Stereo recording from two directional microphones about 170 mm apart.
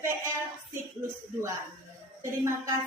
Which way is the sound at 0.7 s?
15° right (ahead or behind).